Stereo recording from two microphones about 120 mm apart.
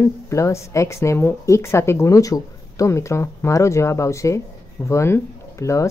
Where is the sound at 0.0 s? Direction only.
25° left (ahead or behind).